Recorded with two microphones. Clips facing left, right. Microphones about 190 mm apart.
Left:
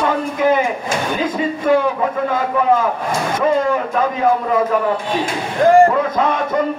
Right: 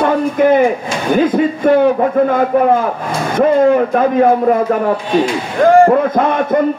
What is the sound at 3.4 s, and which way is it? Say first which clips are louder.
Speech: right 8 dB; 50° right (ahead or behind).